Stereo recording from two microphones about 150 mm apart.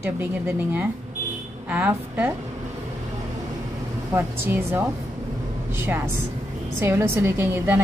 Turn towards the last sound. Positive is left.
turn(degrees=-15)  # may be behind; listen again after turning